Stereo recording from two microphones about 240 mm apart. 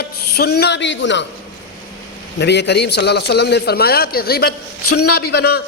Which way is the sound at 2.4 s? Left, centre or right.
Left.